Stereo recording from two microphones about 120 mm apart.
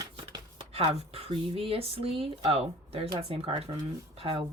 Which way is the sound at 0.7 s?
55° right (ahead or behind).